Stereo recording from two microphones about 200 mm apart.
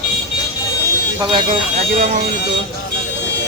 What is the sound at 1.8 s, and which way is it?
Speech, 35° right (ahead or behind).